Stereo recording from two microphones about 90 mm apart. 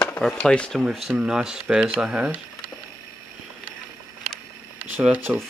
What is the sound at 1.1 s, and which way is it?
Speech, 10° right (ahead or behind).